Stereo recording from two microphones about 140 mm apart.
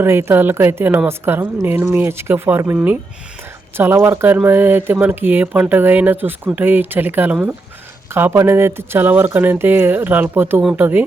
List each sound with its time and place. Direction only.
0.0 s speech: 15° right (ahead or behind)